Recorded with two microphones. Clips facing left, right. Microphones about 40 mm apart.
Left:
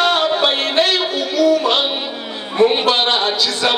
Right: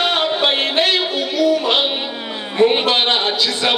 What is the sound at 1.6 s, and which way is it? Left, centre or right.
Music, centre.